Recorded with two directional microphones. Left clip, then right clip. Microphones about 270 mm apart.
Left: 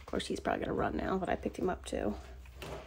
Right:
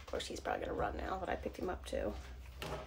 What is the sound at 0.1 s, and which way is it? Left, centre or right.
Speech, left.